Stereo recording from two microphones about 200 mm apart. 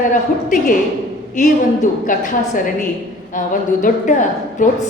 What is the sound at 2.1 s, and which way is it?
A woman's voice, 40° left (ahead or behind).